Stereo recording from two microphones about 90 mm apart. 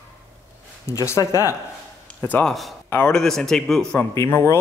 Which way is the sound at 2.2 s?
20° left (ahead or behind).